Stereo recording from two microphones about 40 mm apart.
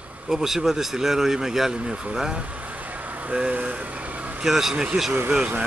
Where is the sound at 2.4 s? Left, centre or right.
Right.